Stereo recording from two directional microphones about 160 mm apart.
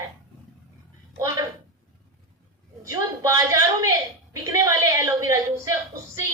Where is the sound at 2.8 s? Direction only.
20° right (ahead or behind).